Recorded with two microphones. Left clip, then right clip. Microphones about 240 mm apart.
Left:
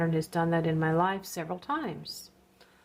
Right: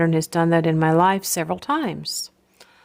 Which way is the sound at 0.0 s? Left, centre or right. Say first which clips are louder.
Right 9 dB; right.